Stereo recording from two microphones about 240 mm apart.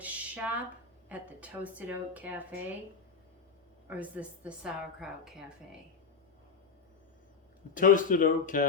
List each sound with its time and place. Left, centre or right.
0.0 s a sound: centre
1.0 s speech: centre
3.8 s a woman's voice: centre
7.7 s speech: left